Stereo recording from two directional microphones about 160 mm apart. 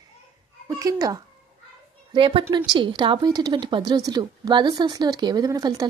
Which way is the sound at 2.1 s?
35° right (ahead or behind).